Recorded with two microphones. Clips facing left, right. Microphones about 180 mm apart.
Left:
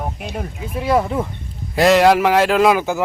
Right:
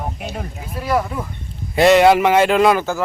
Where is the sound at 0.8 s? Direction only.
25° left (ahead or behind).